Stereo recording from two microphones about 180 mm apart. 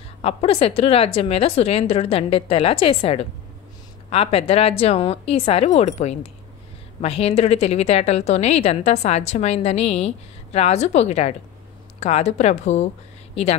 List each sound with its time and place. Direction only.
0.2 s a woman's voice: 35° left (ahead or behind)